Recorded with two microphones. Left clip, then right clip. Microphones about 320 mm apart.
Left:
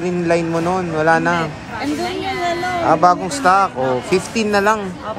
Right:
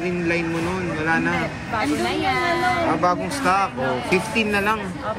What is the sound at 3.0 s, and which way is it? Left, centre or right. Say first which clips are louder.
Speech: left 7 dB; centre.